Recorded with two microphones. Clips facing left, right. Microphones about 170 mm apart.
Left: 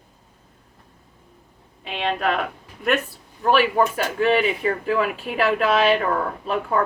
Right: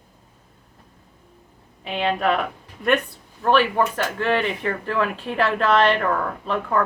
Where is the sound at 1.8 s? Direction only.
Centre (ahead or behind).